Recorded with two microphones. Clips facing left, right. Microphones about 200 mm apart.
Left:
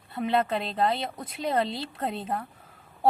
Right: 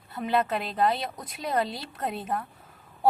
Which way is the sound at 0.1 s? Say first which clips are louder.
Left 1 dB; 25° left (ahead or behind).